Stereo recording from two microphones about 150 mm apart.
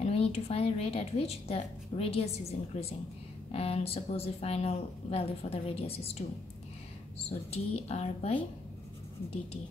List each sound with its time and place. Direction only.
0.0 s speech: 45° left (ahead or behind)
7.2 s speech: 45° left (ahead or behind)